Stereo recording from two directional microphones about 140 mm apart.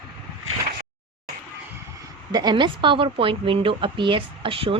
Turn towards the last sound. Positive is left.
turn(degrees=-40)  # may be behind; listen again after turning